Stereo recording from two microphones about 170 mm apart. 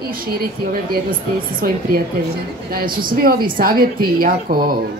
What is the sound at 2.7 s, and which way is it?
Speech, 60° right (ahead or behind).